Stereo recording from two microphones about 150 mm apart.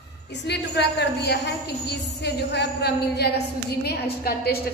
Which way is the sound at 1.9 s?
90° left.